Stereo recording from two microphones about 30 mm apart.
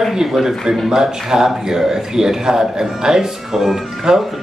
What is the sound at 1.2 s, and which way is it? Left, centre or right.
Speech, centre.